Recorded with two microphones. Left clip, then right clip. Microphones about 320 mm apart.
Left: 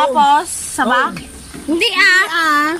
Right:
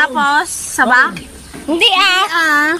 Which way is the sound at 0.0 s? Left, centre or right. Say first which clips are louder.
Left 1 dB; centre.